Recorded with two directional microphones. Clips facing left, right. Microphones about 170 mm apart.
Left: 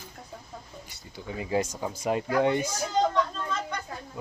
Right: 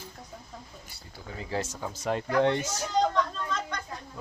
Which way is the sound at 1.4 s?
15° left (ahead or behind).